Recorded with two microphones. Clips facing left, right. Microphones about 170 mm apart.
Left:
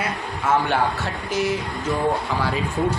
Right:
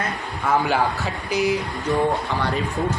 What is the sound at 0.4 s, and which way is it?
Speech, centre (ahead or behind).